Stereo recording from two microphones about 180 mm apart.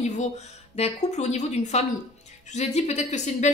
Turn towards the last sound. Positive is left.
turn(degrees=40)  # may be behind; listen again after turning